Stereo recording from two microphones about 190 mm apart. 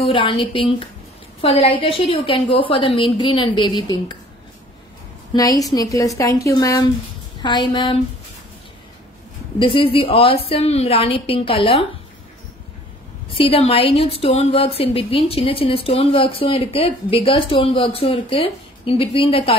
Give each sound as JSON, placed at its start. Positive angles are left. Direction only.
{"t": 0.0, "sound": "a woman's voice", "side_deg": 25}
{"t": 5.3, "sound": "a woman's voice", "side_deg": 20}
{"t": 9.6, "sound": "a woman's voice", "side_deg": 25}
{"t": 13.3, "sound": "a woman's voice", "side_deg": 30}